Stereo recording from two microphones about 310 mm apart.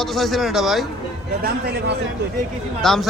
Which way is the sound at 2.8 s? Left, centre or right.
Centre.